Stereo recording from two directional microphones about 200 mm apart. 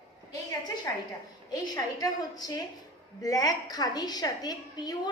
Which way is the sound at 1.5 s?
20° left (ahead or behind).